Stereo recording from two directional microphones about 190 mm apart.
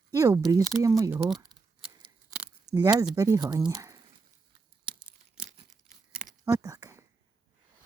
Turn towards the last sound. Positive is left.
turn(degrees=-15)  # may be behind; listen again after turning